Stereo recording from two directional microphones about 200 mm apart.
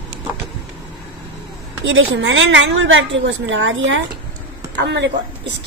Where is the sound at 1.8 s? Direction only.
70° right (ahead or behind).